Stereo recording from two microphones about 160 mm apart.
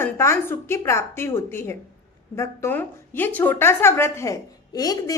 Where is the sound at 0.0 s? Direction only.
15° left (ahead or behind).